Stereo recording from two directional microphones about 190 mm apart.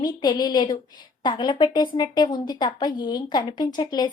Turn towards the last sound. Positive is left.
turn(degrees=25)  # may be behind; listen again after turning